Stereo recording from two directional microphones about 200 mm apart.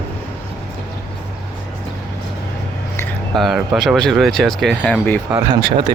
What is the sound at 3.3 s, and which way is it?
Speech, centre (ahead or behind).